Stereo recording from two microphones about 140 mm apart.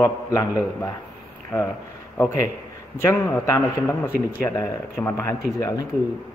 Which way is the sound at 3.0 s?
15° left (ahead or behind).